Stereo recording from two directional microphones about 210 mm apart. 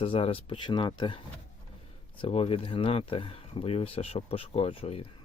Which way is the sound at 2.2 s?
30° left (ahead or behind).